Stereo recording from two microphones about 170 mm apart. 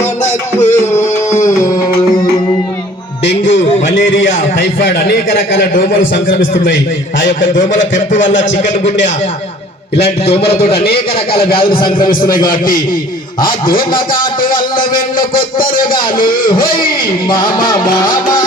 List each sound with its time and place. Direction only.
0.0 s music: 15° left (ahead or behind)
3.2 s a sound: 90° left
3.8 s a sound: 50° left (ahead or behind)
4.3 s a man's voice: 60° left (ahead or behind)
7.8 s a man's voice: 50° left (ahead or behind)
8.2 s a man's voice: 90° left
10.2 s speech: 35° left (ahead or behind)
11.9 s music: 25° left (ahead or behind)
12.5 s a man's voice: 55° left (ahead or behind)
17.2 s music: 25° left (ahead or behind)